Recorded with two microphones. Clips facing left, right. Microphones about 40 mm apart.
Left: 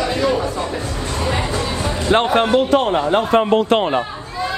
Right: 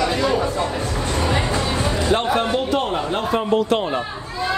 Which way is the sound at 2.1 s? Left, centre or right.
Left.